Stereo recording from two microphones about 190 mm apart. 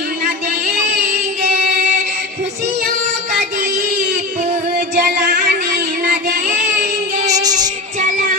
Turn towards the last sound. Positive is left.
turn(degrees=-20)  # may be behind; listen again after turning